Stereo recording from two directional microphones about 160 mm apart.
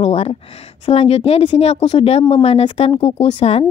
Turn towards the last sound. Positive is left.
turn(degrees=40)  # may be behind; listen again after turning